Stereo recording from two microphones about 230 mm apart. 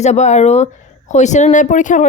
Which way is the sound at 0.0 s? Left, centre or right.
Left.